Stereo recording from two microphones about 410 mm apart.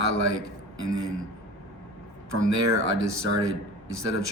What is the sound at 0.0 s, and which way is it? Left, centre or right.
A man's voice, right.